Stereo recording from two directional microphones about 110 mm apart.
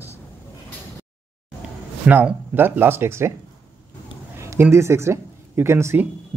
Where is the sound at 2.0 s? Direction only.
15° right (ahead or behind).